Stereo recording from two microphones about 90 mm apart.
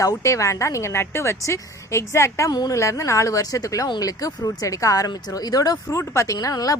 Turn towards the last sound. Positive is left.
turn(degrees=40)  # may be behind; listen again after turning